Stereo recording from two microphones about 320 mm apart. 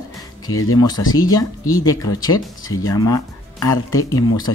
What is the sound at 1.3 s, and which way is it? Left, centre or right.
Speech, centre.